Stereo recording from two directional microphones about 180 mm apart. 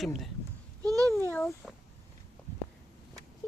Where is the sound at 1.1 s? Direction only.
10° left (ahead or behind).